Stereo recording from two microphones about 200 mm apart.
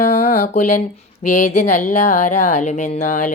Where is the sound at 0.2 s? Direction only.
50° left (ahead or behind).